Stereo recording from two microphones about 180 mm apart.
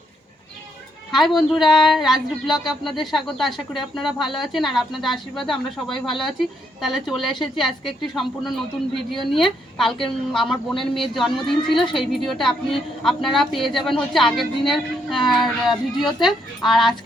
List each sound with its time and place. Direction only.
1.1 s a woman's voice: centre (ahead or behind)
1.6 s a sound: 25° left (ahead or behind)
1.9 s a woman's voice: centre (ahead or behind)